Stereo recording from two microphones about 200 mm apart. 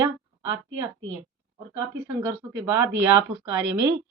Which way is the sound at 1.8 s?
10° right (ahead or behind).